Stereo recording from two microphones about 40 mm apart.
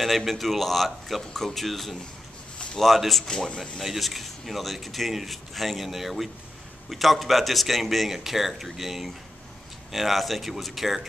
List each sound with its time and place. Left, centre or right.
0.0 s speech: centre
3.3 s speech: centre
3.8 s speech: centre